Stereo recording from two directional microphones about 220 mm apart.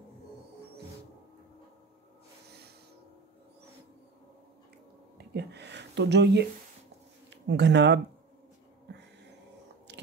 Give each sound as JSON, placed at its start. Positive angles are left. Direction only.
{"t": 5.1, "sound": "speech", "side_deg": -50}